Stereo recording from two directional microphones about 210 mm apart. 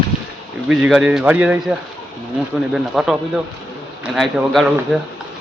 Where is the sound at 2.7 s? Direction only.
Centre (ahead or behind).